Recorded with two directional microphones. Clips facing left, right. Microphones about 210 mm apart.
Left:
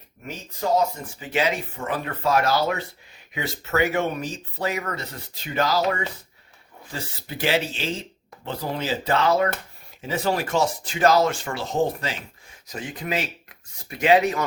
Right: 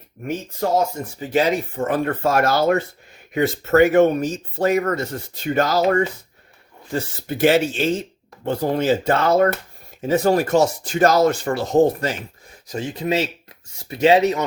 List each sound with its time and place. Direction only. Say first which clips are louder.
1.0 s speech: right 5 dB; 45° right (ahead or behind)
12.6 s speech: right 7 dB; 30° right (ahead or behind)